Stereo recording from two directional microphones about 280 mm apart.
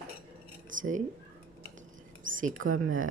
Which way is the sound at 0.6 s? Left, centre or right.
Right.